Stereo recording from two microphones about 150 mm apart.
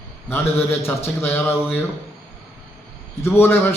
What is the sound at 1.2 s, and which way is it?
Speech, 15° left (ahead or behind).